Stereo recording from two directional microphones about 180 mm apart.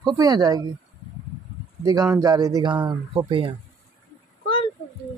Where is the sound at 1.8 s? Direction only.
20° right (ahead or behind).